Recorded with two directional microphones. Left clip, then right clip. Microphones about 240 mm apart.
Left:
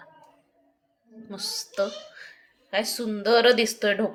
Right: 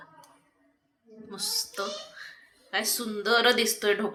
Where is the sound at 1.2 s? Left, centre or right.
Left.